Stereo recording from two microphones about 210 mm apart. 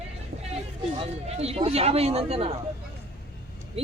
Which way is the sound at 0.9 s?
30° right (ahead or behind).